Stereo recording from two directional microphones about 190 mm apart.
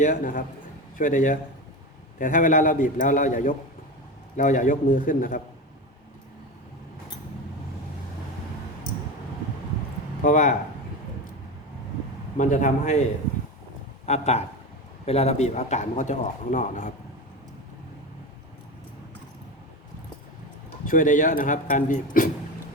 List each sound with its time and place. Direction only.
0.0 s speech: 45° left (ahead or behind)
10.2 s speech: 45° left (ahead or behind)
12.4 s a man's voice: 40° left (ahead or behind)
14.1 s a man's voice: 35° left (ahead or behind)
20.8 s speech: 45° left (ahead or behind)